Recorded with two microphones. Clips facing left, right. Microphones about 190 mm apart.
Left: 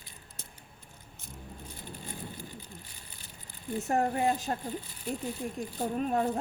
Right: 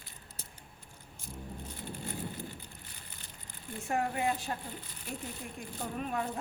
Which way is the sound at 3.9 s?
40° left (ahead or behind).